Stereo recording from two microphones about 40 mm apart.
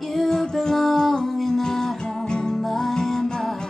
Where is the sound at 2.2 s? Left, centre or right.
Centre.